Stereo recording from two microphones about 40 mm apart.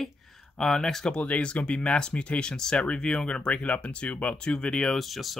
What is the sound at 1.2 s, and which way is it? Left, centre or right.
Speech, left.